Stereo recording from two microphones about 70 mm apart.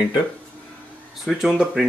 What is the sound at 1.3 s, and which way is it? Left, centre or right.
Speech, centre.